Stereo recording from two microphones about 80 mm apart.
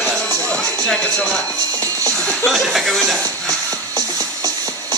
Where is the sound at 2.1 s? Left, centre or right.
Centre.